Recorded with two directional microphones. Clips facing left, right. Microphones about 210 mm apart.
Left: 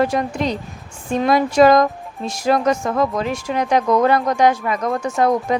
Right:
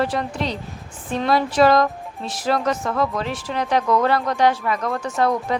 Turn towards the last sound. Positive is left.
turn(degrees=15)  # may be behind; listen again after turning